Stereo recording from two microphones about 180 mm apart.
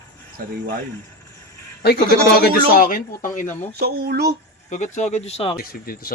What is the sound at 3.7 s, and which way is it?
Speech, 60° right (ahead or behind).